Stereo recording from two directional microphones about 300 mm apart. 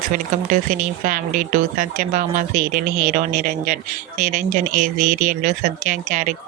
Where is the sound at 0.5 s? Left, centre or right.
Right.